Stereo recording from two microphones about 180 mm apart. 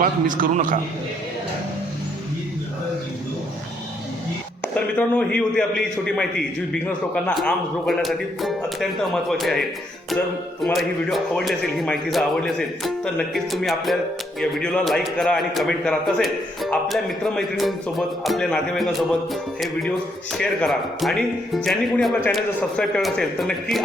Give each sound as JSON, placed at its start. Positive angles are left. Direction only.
{"t": 0.0, "sound": "a man's voice", "side_deg": -50}
{"t": 4.6, "sound": "speech", "side_deg": 10}
{"t": 6.8, "sound": "a man's voice", "side_deg": 10}